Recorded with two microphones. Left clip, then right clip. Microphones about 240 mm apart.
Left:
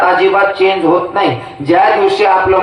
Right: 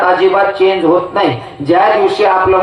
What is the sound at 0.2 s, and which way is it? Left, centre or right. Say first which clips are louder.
A man's voice: even; left.